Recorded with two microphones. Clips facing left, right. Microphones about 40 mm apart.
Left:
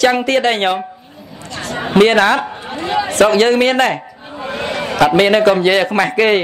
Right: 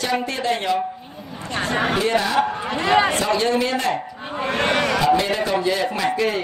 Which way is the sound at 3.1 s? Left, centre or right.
Left.